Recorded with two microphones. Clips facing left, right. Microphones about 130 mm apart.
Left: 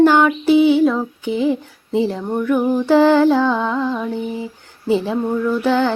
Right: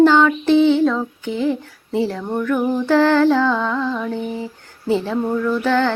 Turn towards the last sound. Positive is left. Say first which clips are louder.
# left 1 dB
turn(degrees=15)  # may be behind; listen again after turning